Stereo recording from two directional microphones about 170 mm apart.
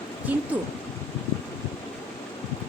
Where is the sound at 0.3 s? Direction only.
10° right (ahead or behind).